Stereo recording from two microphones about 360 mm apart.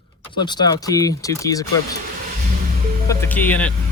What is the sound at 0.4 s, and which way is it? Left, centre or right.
Speech, centre.